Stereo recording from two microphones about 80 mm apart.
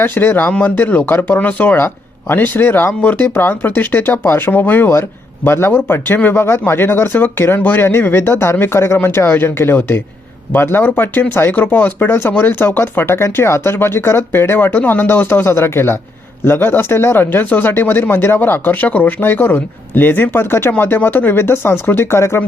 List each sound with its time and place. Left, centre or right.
0.0 s speech: left